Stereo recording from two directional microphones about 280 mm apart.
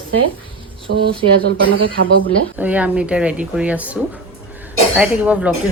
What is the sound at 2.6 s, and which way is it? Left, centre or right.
Speech, centre.